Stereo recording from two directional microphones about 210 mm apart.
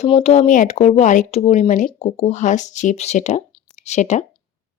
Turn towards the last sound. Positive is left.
turn(degrees=35)  # may be behind; listen again after turning